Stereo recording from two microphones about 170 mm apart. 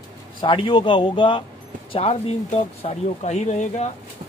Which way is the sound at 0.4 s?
30° left (ahead or behind).